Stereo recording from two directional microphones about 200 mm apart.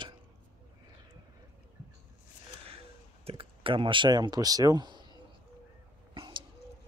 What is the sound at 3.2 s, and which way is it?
Speech, 25° right (ahead or behind).